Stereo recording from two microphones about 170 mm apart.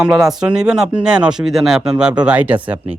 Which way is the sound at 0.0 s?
Centre (ahead or behind).